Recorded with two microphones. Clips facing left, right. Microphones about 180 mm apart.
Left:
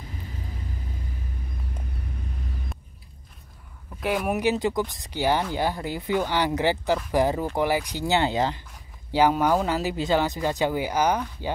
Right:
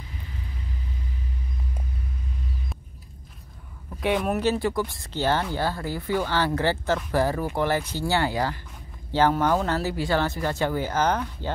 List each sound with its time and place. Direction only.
4.0 s speech: centre (ahead or behind)
4.3 s speech: 15° left (ahead or behind)